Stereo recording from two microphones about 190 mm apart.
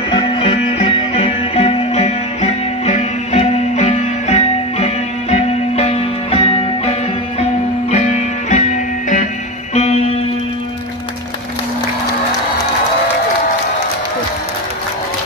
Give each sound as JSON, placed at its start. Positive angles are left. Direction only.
{"t": 0.1, "sound": "music", "side_deg": 25}
{"t": 9.8, "sound": "music", "side_deg": 35}